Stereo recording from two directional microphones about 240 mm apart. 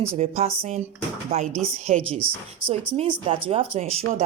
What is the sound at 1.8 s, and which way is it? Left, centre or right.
Speech, right.